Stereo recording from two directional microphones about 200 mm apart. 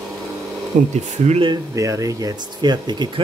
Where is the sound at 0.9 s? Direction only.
35° right (ahead or behind).